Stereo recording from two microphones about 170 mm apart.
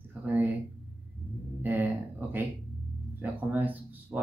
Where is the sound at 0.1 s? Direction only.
10° right (ahead or behind).